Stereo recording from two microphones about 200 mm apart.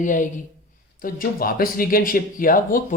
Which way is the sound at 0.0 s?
40° left (ahead or behind).